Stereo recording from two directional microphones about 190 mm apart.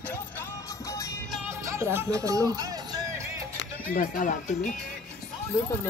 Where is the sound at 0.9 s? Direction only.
15° left (ahead or behind).